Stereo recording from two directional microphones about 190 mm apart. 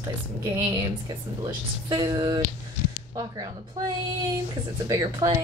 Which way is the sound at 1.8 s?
25° right (ahead or behind).